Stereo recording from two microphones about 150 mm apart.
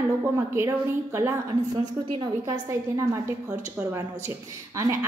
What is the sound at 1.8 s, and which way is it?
A woman's voice, 25° right (ahead or behind).